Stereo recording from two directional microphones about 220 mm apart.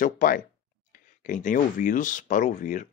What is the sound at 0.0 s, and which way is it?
Speech, 40° left (ahead or behind).